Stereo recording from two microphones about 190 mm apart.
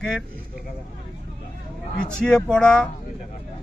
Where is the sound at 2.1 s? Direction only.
5° left (ahead or behind).